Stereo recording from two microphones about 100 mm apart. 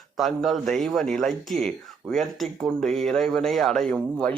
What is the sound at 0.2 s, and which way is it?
A man's voice, centre (ahead or behind).